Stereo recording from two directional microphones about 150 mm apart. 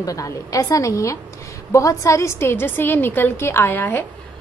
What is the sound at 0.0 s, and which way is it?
A woman's voice, 20° left (ahead or behind).